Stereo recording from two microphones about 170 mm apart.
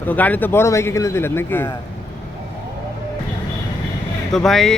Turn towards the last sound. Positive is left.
turn(degrees=0)  # may be behind; listen again after turning